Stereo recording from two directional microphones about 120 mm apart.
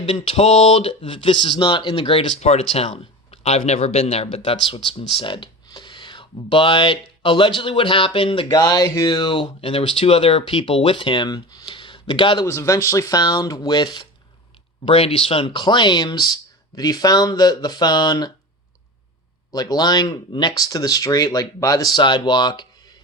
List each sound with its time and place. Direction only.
0.0 s speech: 50° left (ahead or behind)
2.4 s speech: 60° left (ahead or behind)
8.5 s speech: 30° left (ahead or behind)
12.5 s speech: 25° left (ahead or behind)
14.8 s speech: 50° left (ahead or behind); by 18.3 s 35° left (ahead or behind)
19.5 s speech: 30° left (ahead or behind)